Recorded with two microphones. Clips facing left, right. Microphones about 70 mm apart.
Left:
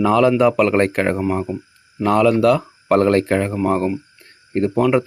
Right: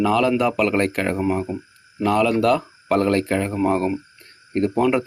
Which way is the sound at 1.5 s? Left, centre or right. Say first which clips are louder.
Left 2 dB; right.